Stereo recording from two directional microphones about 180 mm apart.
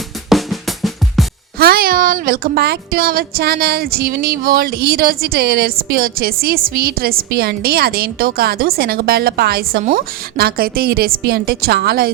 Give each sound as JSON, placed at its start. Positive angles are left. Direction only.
{"t": 0.3, "sound": "drum", "side_deg": 0}
{"t": 1.5, "sound": "speech", "side_deg": -55}